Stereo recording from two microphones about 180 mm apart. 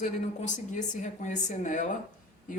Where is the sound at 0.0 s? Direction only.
40° left (ahead or behind).